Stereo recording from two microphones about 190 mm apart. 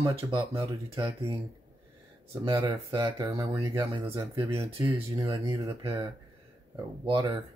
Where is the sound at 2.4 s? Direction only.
25° right (ahead or behind).